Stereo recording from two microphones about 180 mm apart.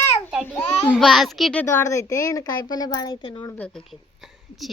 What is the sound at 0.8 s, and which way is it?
A child's voice, 5° left (ahead or behind).